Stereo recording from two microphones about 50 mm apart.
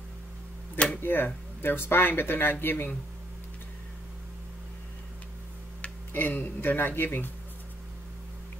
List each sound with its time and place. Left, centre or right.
1.0 s speech: left
6.1 s speech: left